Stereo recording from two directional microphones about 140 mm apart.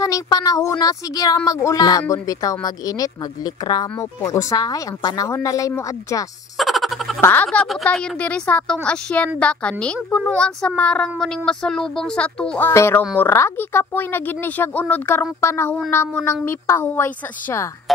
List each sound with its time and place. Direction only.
0.0 s speech: 25° left (ahead or behind)
6.5 s a sound: centre (ahead or behind)
7.2 s speech: 15° left (ahead or behind)
7.4 s speech: centre (ahead or behind)